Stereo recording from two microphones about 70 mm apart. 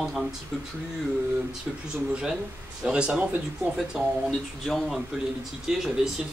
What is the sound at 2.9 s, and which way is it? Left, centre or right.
Speech, centre.